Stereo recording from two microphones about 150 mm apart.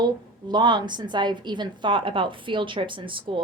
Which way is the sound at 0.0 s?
30° right (ahead or behind).